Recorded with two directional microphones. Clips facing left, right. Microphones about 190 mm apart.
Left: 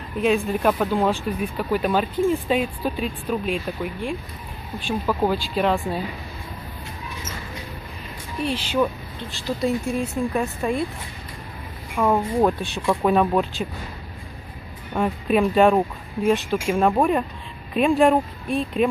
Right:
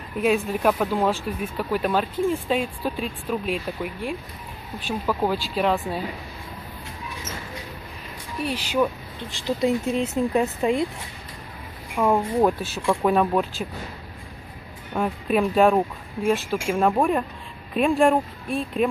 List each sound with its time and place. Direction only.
0.2 s speech: 5° right (ahead or behind)
8.4 s speech: 10° right (ahead or behind)
9.6 s speech: 20° right (ahead or behind)
11.9 s speech: 10° right (ahead or behind)
15.0 s speech: centre (ahead or behind)